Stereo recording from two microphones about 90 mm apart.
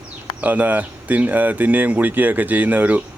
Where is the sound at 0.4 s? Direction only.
20° right (ahead or behind).